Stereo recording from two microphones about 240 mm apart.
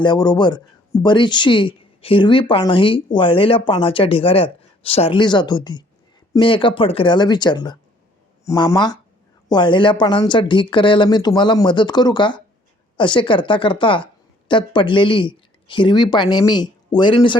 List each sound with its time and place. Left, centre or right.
0.0 s speech: centre